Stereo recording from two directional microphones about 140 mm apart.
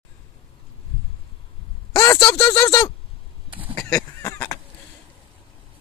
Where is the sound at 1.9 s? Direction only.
30° left (ahead or behind).